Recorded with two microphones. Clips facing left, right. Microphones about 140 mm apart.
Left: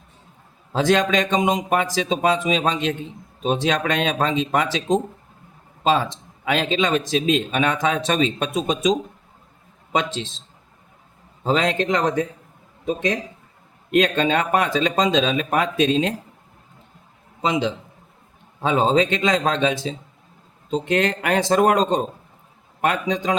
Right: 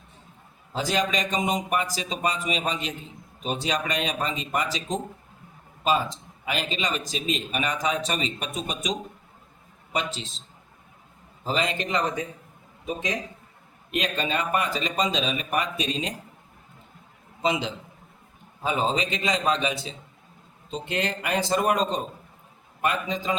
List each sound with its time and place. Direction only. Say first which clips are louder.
0.7 s a man's voice: left 7 dB; 90° left
9.9 s a man's voice: left 6 dB; 90° left
11.4 s a man's voice: left 7 dB; 85° left
18.6 s a man's voice: left 7 dB; 90° left
22.8 s a man's voice: left 5 dB; 80° left